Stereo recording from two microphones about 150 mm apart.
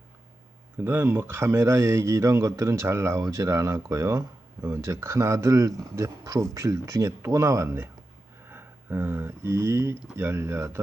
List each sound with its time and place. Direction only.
0.8 s speech: 15° right (ahead or behind)